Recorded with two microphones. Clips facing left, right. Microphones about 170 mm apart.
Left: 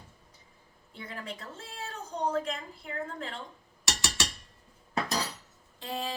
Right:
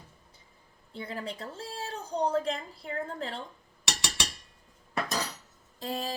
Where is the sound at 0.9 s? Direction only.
35° right (ahead or behind).